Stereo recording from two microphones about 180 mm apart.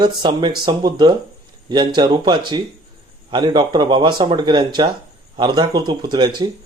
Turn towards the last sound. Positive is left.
turn(degrees=-25)  # may be behind; listen again after turning